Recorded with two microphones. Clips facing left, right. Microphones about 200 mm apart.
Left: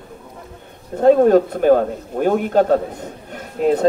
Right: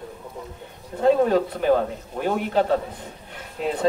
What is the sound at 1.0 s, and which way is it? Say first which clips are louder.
Speech: left 7 dB; 45° left (ahead or behind).